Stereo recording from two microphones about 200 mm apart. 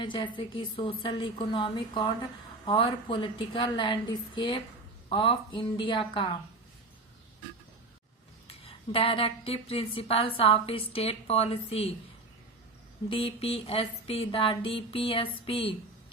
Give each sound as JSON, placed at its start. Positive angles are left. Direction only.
{"t": 0.0, "sound": "speech", "side_deg": 25}
{"t": 8.9, "sound": "speech", "side_deg": 25}
{"t": 13.1, "sound": "speech", "side_deg": 25}